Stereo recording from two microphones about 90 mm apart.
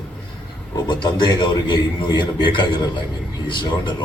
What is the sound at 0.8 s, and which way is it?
A man's voice, 55° left (ahead or behind).